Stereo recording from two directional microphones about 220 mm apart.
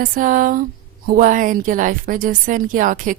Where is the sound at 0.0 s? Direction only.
40° right (ahead or behind).